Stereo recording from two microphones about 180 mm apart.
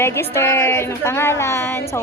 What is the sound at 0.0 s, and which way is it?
A woman's voice, 15° left (ahead or behind).